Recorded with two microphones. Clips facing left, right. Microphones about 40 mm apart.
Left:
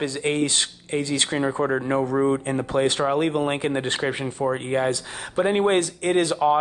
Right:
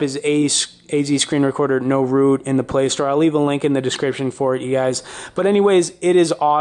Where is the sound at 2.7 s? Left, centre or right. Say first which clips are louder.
Right 1 dB; centre.